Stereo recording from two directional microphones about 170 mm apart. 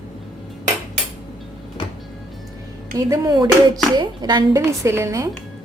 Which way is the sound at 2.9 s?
20° right (ahead or behind).